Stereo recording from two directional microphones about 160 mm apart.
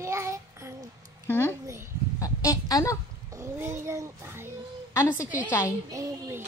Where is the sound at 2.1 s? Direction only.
20° left (ahead or behind).